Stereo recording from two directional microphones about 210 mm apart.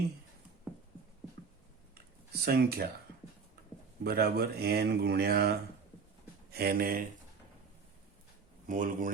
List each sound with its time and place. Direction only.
2.4 s speech: 50° right (ahead or behind)
4.0 s speech: 50° right (ahead or behind)
8.6 s speech: 40° right (ahead or behind)